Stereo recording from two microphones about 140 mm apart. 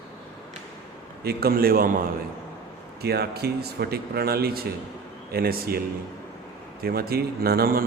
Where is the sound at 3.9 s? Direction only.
90° right.